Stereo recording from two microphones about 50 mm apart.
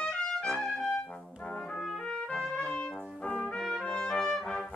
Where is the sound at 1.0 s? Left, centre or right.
Left.